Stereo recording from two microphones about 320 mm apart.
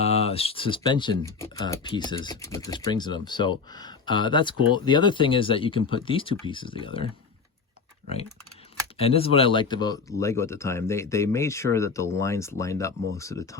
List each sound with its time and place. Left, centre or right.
0.0 s speech: centre
9.0 s speech: centre